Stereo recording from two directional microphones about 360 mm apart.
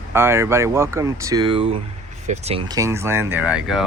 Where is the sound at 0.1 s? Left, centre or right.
Centre.